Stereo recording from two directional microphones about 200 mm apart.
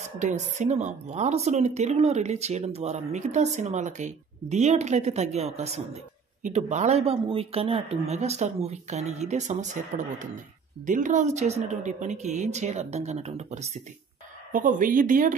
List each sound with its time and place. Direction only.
0.2 s a woman's voice: 35° right (ahead or behind)